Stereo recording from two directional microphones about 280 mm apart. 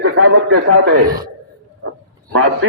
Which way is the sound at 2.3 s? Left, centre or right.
Right.